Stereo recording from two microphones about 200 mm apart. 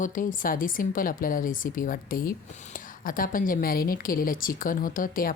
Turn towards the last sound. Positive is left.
turn(degrees=45)  # may be behind; listen again after turning